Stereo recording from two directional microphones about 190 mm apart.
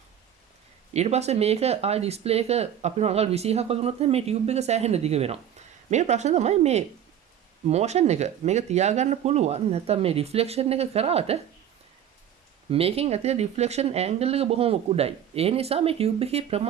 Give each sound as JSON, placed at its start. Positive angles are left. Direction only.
{"t": 0.9, "sound": "speech", "side_deg": -35}
{"t": 12.7, "sound": "speech", "side_deg": -30}